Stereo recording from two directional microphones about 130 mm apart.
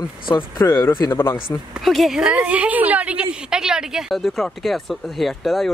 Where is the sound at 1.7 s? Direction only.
Centre (ahead or behind).